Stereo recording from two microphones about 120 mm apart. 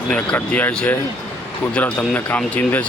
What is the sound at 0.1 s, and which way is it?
Speech, 10° left (ahead or behind).